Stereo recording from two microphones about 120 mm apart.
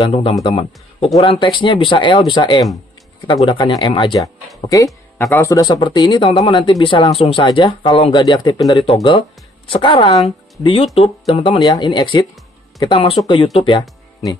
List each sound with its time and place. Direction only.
0.1 s speech: 55° left (ahead or behind)
4.6 s speech: 30° left (ahead or behind); by 11.6 s 50° left (ahead or behind)
11.6 s speech: 35° left (ahead or behind)